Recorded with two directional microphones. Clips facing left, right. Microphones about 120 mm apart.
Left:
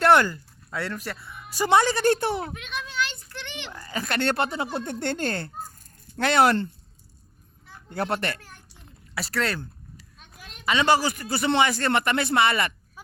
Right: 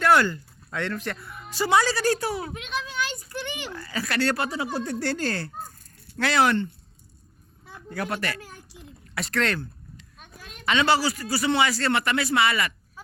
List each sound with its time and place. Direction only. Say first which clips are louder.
0.3 s speech: right 2 dB; 10° left (ahead or behind)
1.5 s speech: left 1 dB; 20° left (ahead or behind)
2.5 s a sound: right 3 dB; 10° right (ahead or behind)
3.7 s speech: even; 20° left (ahead or behind)
7.9 s speech: left 2 dB; 30° left (ahead or behind)
9.1 s speech: right 1 dB; 5° left (ahead or behind)
10.7 s speech: left 1 dB; 15° left (ahead or behind)